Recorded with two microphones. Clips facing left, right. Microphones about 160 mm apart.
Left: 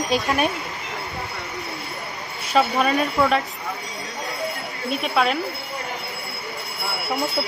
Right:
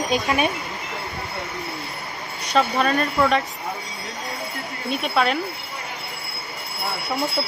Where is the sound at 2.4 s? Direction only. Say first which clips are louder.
Left 1 dB; 5° left (ahead or behind).